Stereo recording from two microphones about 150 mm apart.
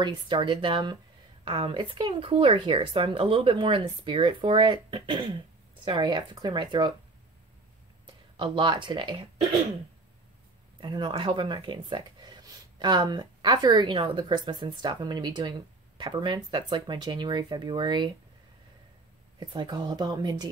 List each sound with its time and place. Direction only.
0.0 s speech: 35° right (ahead or behind)
8.4 s speech: 30° right (ahead or behind)
10.8 s speech: 30° right (ahead or behind)
19.4 s speech: 30° right (ahead or behind)